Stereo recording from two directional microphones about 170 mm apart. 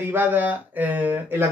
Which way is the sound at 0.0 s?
10° right (ahead or behind).